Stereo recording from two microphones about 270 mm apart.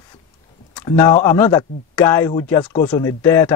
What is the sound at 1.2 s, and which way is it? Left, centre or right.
Speech, centre.